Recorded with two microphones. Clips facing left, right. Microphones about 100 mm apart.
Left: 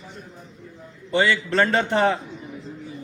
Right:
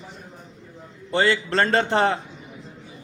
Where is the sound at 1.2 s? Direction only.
35° right (ahead or behind).